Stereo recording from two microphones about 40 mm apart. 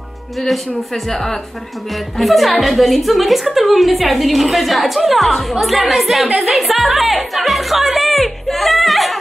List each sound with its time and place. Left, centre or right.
1.1 s speech: centre
1.9 s a woman's voice: centre